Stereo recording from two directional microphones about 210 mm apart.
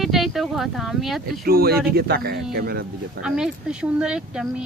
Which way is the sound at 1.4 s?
45° right (ahead or behind).